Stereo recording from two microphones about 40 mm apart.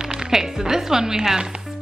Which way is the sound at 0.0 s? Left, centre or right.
Centre.